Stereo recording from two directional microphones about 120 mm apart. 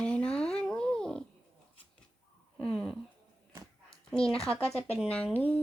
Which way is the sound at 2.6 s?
10° left (ahead or behind).